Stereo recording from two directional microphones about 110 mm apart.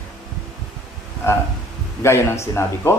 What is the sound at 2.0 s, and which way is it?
Speech, 25° left (ahead or behind).